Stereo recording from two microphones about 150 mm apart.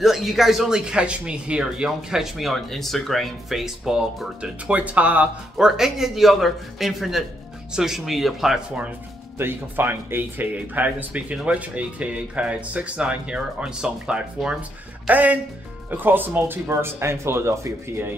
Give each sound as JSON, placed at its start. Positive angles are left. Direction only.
{"t": 0.0, "sound": "speech", "side_deg": 0}